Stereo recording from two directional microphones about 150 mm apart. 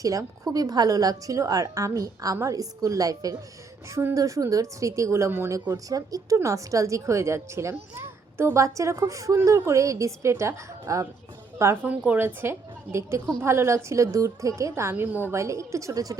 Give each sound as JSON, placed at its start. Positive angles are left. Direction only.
{"t": 0.0, "sound": "a woman's voice", "side_deg": -20}